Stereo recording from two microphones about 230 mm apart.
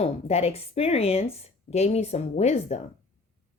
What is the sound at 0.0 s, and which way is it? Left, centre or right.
Speech, left.